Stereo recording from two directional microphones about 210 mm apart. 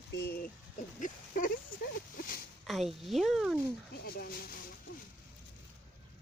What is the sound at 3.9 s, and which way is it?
Speech, 45° left (ahead or behind).